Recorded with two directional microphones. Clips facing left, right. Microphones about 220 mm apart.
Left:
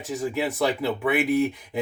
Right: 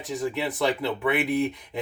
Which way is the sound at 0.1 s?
5° left (ahead or behind).